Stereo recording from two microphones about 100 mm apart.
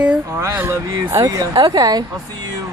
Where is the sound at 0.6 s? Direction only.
25° right (ahead or behind).